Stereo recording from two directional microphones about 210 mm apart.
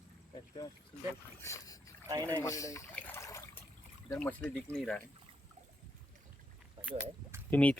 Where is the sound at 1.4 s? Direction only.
15° left (ahead or behind).